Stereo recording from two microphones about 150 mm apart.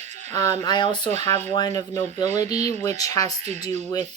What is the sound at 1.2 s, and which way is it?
Speech, 45° right (ahead or behind).